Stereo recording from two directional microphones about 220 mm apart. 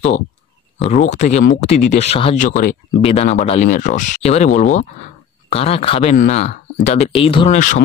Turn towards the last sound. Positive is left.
turn(degrees=35)  # may be behind; listen again after turning